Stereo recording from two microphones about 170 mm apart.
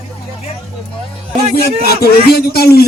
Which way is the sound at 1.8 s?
65° left (ahead or behind).